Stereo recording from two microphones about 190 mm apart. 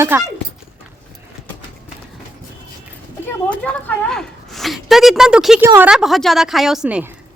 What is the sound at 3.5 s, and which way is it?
A woman's voice, 5° left (ahead or behind).